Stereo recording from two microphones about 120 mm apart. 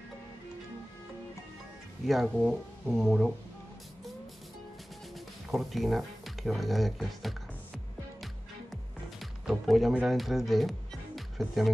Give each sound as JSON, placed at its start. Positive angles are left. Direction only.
{"t": 2.0, "sound": "speech", "side_deg": 0}
{"t": 5.5, "sound": "speech", "side_deg": 0}
{"t": 9.2, "sound": "speech", "side_deg": 0}